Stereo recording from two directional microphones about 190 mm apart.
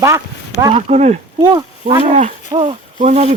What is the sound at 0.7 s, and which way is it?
Speech, 35° right (ahead or behind).